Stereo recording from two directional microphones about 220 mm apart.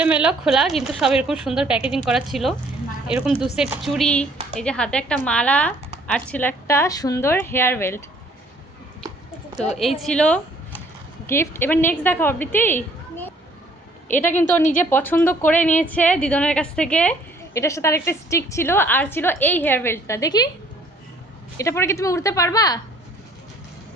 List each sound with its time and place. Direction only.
0.0 s a woman's voice: 5° right (ahead or behind); by 8.0 s 10° left (ahead or behind)
9.6 s a woman's voice: centre (ahead or behind)
14.6 s a woman's voice: 35° left (ahead or behind)
14.8 s a woman's voice: 10° left (ahead or behind)
21.6 s a woman's voice: 10° left (ahead or behind)